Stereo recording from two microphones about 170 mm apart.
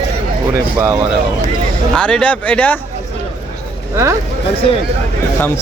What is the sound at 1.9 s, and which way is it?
Speech, 5° left (ahead or behind).